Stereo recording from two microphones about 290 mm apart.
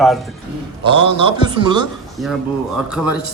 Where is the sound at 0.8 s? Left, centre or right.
Centre.